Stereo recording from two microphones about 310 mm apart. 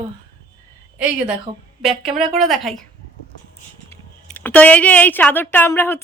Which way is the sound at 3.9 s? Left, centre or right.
Centre.